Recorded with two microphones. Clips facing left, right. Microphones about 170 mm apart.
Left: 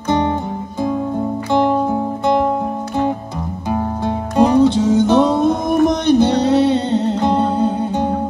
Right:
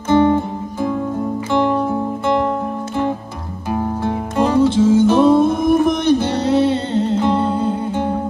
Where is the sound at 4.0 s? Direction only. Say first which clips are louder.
Left 5 dB; 15° left (ahead or behind).